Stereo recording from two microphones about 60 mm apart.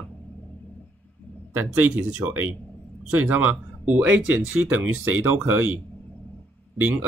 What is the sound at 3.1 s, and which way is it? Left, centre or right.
Speech, right.